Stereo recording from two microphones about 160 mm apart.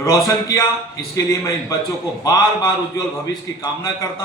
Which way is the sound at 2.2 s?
20° left (ahead or behind).